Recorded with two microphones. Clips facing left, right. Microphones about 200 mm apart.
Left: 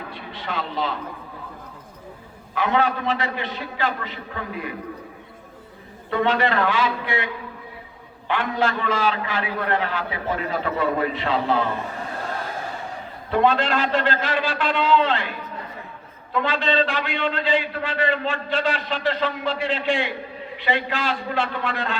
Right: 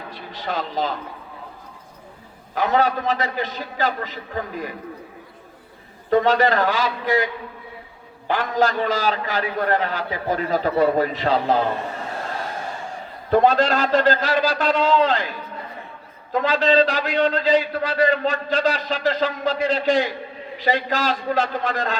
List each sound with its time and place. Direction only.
0.1 s a man's voice: 40° right (ahead or behind)
2.6 s a man's voice: 40° right (ahead or behind)
6.1 s a man's voice: 40° right (ahead or behind)
8.3 s a man's voice: 40° right (ahead or behind)
13.3 s a man's voice: 40° right (ahead or behind)